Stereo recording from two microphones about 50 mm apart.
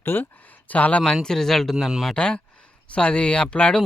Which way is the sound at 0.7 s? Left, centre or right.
Left.